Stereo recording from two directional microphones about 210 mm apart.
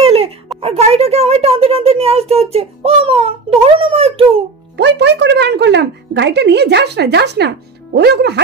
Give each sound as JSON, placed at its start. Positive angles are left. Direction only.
{"t": 0.0, "sound": "a sound", "side_deg": -30}
{"t": 0.6, "sound": "speech", "side_deg": -30}
{"t": 4.7, "sound": "speech", "side_deg": -55}